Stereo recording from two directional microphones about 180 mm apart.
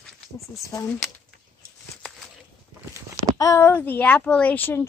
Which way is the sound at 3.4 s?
15° left (ahead or behind).